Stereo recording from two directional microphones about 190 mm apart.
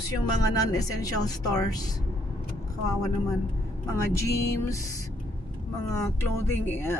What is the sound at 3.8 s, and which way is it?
Speech, 15° left (ahead or behind).